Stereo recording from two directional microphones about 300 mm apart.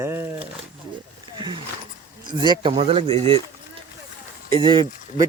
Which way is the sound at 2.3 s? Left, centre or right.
Centre.